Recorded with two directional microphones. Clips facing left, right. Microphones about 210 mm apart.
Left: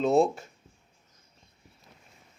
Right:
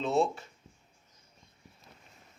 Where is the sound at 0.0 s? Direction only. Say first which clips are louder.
Left 5 dB; 45° left (ahead or behind).